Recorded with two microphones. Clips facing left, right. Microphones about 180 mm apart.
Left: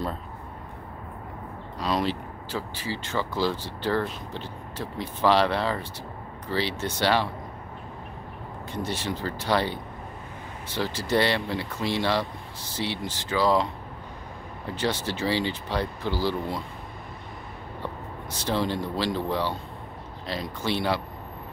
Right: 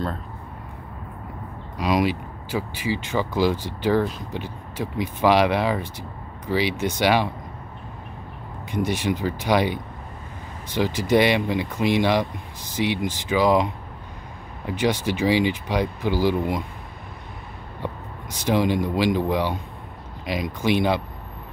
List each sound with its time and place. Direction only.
1.8 s speech: 10° right (ahead or behind)
8.7 s speech: 15° right (ahead or behind)
14.7 s speech: 15° right (ahead or behind)
17.8 s speech: 15° right (ahead or behind)